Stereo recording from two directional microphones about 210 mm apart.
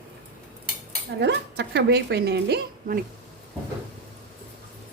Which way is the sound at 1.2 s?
55° right (ahead or behind).